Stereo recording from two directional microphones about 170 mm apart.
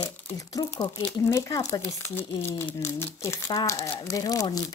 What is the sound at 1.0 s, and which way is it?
Speech, 15° left (ahead or behind).